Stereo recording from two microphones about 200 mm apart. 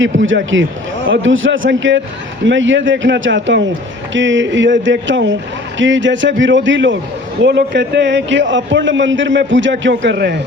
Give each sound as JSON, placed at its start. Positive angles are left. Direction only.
{"t": 0.2, "sound": "a man's voice", "side_deg": -70}